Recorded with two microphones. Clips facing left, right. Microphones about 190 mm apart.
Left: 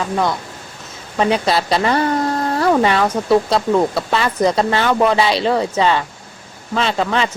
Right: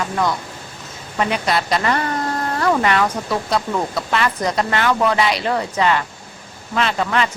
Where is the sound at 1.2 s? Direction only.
30° left (ahead or behind).